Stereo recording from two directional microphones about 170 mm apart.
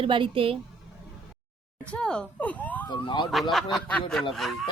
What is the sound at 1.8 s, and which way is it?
Speech, 5° left (ahead or behind).